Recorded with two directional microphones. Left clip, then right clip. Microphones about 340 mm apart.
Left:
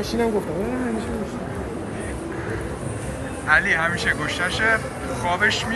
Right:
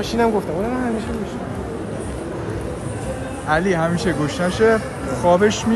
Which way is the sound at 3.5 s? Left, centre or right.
Centre.